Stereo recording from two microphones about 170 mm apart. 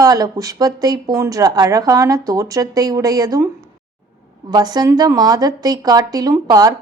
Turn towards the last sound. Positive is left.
turn(degrees=-20)  # may be behind; listen again after turning